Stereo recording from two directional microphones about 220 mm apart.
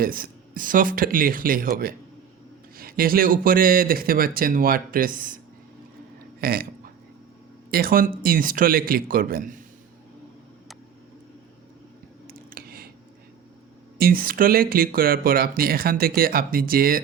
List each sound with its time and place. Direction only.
0.0 s speech: 40° right (ahead or behind)
6.4 s speech: 45° right (ahead or behind)
7.7 s speech: 40° right (ahead or behind)
12.3 s a sound: 45° right (ahead or behind)
14.0 s speech: 40° right (ahead or behind)